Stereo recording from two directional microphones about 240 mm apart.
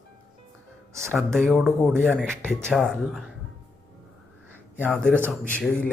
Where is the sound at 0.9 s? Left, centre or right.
Centre.